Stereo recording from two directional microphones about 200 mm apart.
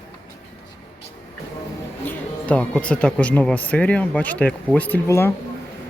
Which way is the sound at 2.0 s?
5° left (ahead or behind).